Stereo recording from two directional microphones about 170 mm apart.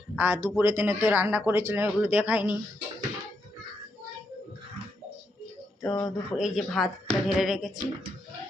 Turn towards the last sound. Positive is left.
turn(degrees=0)  # may be behind; listen again after turning